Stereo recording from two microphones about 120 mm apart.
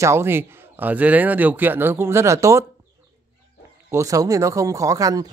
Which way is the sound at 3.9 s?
25° right (ahead or behind).